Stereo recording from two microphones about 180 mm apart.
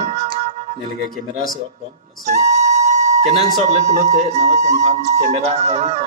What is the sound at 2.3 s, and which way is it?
Flute, 40° right (ahead or behind).